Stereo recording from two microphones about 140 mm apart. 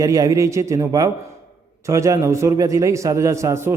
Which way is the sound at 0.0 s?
25° right (ahead or behind).